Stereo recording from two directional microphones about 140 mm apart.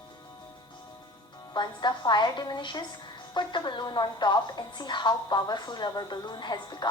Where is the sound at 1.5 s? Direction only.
30° left (ahead or behind).